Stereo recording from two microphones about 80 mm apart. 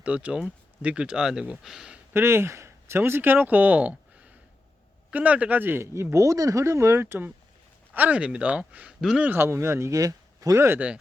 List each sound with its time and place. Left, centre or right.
0.0 s speech: centre
2.1 s speech: right
7.9 s speech: centre
9.3 s speech: right